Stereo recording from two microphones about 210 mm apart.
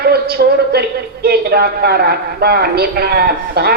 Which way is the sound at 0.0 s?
45° right (ahead or behind).